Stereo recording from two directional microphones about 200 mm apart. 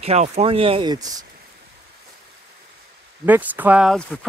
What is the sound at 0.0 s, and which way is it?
Speech, 30° right (ahead or behind).